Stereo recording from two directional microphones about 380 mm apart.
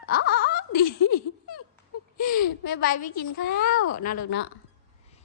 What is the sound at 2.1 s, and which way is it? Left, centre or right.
A woman's voice, left.